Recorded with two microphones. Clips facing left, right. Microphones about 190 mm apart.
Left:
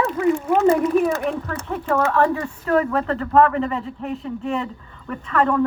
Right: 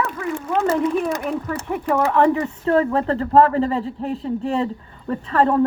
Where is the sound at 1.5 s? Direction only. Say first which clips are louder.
Right 1 dB; 15° right (ahead or behind); by 5.6 s 30° right (ahead or behind).